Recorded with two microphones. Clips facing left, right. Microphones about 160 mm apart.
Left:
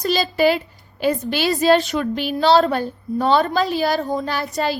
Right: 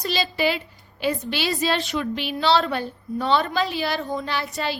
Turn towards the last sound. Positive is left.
turn(degrees=40)  # may be behind; listen again after turning